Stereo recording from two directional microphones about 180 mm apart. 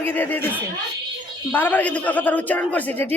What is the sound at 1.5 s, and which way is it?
A man's voice, 10° left (ahead or behind).